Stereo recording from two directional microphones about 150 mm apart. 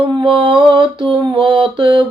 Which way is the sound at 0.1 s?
30° right (ahead or behind).